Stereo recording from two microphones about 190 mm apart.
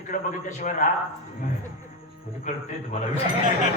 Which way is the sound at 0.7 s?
40° left (ahead or behind).